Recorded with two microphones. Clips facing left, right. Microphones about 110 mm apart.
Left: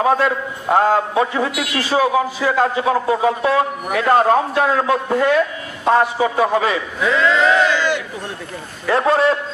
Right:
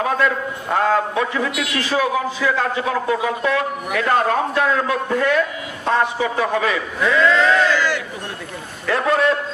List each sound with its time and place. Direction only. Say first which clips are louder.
0.0 s a man's voice: left 3 dB; 30° left (ahead or behind)
7.0 s speech: even; 5° left (ahead or behind)
7.5 s speech: left 1 dB; 20° left (ahead or behind)
8.8 s a man's voice: left 3 dB; 30° left (ahead or behind)